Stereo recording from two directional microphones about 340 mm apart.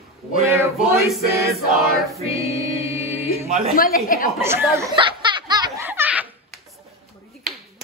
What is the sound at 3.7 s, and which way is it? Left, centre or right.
Speech, left.